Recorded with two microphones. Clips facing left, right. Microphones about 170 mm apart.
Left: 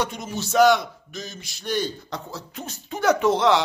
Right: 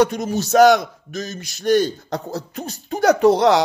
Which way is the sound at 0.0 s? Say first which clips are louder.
Right 9 dB; 40° right (ahead or behind).